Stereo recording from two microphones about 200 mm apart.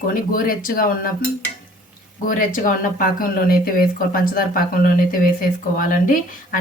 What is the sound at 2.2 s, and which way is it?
Speech, 40° left (ahead or behind).